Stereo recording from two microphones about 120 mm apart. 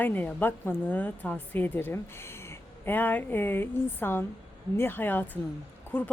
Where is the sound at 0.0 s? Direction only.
15° left (ahead or behind).